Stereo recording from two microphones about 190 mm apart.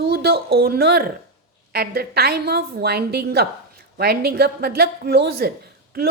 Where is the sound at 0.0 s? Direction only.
55° right (ahead or behind).